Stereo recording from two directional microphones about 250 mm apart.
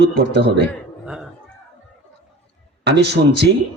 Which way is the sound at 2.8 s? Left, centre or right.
Right.